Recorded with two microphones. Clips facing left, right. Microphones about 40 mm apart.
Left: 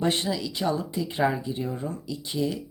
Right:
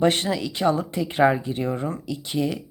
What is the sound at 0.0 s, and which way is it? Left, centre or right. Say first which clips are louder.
Speech: right 5 dB; right.